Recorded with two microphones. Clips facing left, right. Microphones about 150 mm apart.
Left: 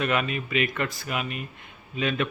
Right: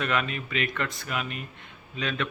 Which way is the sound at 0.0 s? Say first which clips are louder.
Left 2 dB; 5° left (ahead or behind).